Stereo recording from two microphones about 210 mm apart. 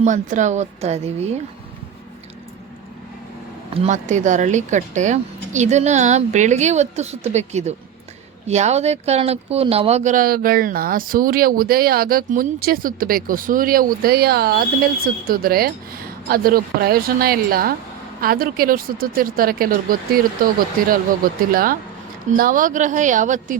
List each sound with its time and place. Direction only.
0.0 s speech: 35° right (ahead or behind)
3.8 s speech: 35° right (ahead or behind)
21.5 s speech: 45° right (ahead or behind)